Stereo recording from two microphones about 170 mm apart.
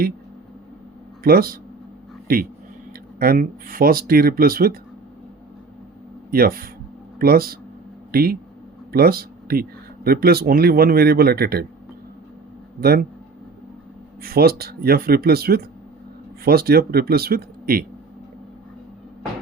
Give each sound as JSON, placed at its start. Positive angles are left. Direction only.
{"t": 1.2, "sound": "speech", "side_deg": -60}
{"t": 6.3, "sound": "speech", "side_deg": -60}
{"t": 12.8, "sound": "speech", "side_deg": -60}
{"t": 14.2, "sound": "speech", "side_deg": -65}